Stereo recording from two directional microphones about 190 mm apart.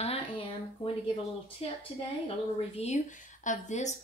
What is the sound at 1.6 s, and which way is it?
Speech, 30° left (ahead or behind).